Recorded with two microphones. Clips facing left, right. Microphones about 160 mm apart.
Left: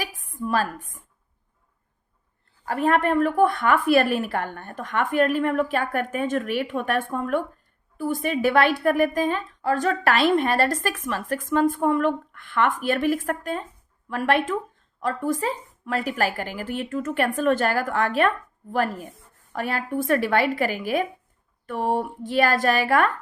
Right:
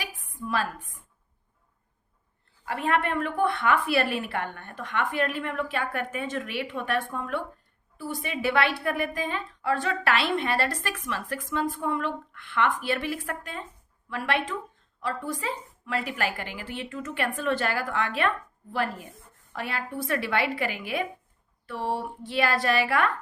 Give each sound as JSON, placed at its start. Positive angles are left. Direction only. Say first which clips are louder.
{"t": 0.3, "sound": "speech", "louder": "left 5 dB", "side_deg": 45}
{"t": 2.6, "sound": "a woman's voice", "louder": "left 5 dB", "side_deg": 40}